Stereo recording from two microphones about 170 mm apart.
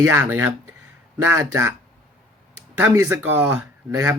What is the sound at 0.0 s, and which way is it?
Speech, 15° right (ahead or behind).